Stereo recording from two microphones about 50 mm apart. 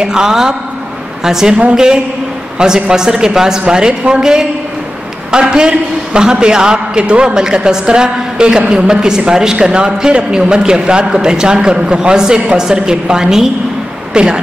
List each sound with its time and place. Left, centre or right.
0.0 s a man's voice: centre
2.6 s a man's voice: centre